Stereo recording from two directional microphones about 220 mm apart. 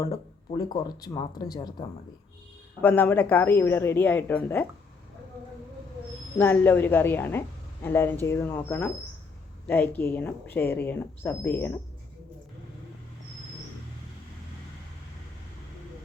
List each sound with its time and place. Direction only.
0.0 s a woman's voice: 15° left (ahead or behind)
2.8 s a woman's voice: 10° left (ahead or behind)
6.4 s a woman's voice: 10° left (ahead or behind)